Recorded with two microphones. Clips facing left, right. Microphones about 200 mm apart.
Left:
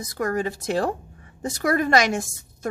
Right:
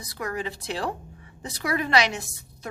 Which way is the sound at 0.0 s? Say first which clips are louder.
Left 6 dB; 45° left (ahead or behind).